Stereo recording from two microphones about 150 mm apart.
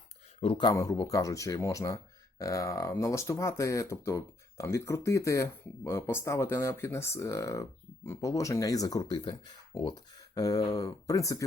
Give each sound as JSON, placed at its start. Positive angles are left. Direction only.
{"t": 0.3, "sound": "speech", "side_deg": 35}